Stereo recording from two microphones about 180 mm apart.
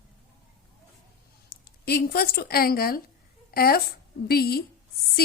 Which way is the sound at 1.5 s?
60° left (ahead or behind).